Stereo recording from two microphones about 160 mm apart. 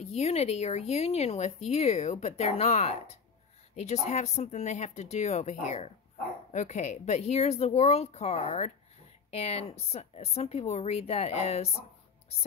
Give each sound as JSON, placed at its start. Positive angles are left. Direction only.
{"t": 0.0, "sound": "speech", "side_deg": 40}